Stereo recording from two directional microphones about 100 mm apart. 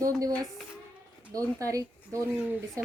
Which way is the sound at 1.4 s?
35° right (ahead or behind).